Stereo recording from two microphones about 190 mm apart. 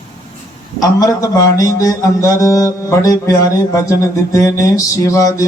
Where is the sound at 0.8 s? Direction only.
20° left (ahead or behind).